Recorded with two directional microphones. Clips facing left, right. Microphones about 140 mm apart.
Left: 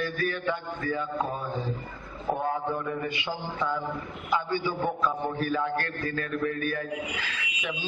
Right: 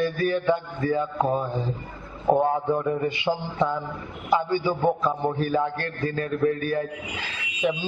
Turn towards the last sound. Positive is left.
turn(degrees=-30)  # may be behind; listen again after turning